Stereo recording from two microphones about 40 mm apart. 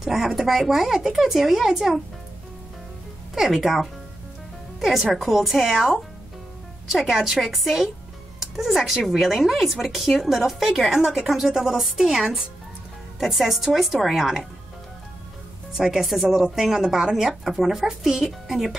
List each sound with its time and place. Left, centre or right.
0.0 s a woman's voice: centre
3.5 s a woman's voice: centre
15.8 s speech: centre